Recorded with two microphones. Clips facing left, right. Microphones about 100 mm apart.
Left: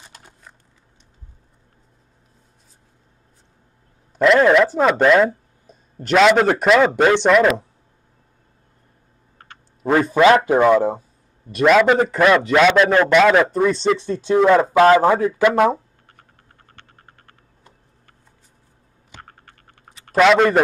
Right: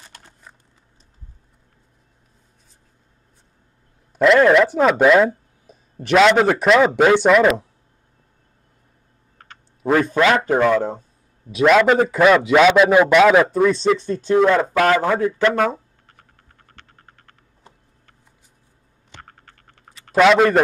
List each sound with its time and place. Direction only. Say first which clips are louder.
4.2 s a man's voice: even; centre (ahead or behind)
10.3 s a man's voice: left 3 dB; 10° left (ahead or behind)
14.5 s speech: left 4 dB; 20° left (ahead or behind)
15.3 s speech: left 3 dB; 10° left (ahead or behind)
20.1 s a man's voice: even; centre (ahead or behind)